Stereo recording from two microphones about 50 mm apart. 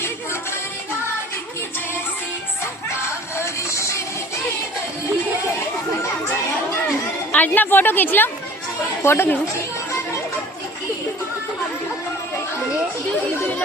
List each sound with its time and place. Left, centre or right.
3.3 s music: left
7.3 s a woman's voice: left